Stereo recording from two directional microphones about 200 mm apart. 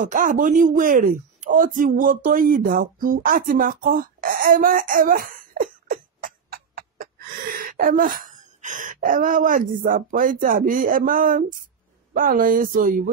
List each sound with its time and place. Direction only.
0.0 s speech: 40° right (ahead or behind)